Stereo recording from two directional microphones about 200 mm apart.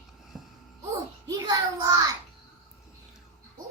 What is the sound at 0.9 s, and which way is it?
Child singing, 20° right (ahead or behind).